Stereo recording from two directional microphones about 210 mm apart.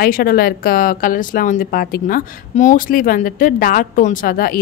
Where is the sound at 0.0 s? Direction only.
45° left (ahead or behind).